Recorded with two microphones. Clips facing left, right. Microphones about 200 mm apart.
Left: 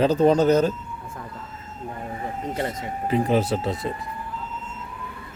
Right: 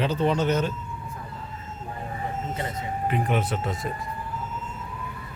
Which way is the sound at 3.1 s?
35° left (ahead or behind).